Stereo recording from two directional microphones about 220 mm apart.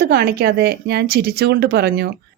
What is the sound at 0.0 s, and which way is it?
Speech, 45° right (ahead or behind).